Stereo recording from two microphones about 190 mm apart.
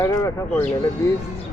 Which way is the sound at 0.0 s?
15° left (ahead or behind).